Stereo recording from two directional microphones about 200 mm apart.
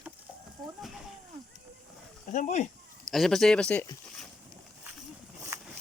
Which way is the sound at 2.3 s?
35° left (ahead or behind).